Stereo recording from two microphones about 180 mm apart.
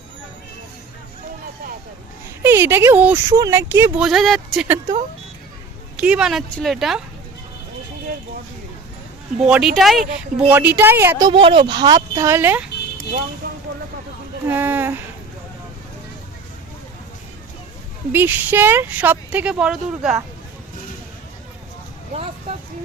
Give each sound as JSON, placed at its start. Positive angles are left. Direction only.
{"t": 2.4, "sound": "speech", "side_deg": -15}
{"t": 4.0, "sound": "speech", "side_deg": 0}
{"t": 6.0, "sound": "speech", "side_deg": -5}
{"t": 9.5, "sound": "speech", "side_deg": -5}
{"t": 11.3, "sound": "speech", "side_deg": -30}
{"t": 13.4, "sound": "vehicle", "side_deg": -50}
{"t": 14.4, "sound": "speech", "side_deg": -10}
{"t": 18.1, "sound": "speech", "side_deg": -10}
{"t": 22.1, "sound": "vehicle", "side_deg": -35}